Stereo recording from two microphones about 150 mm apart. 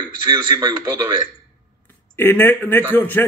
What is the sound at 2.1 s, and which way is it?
A man's voice, 15° left (ahead or behind).